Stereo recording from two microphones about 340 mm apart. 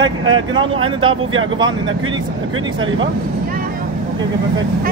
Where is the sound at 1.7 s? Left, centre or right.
Right.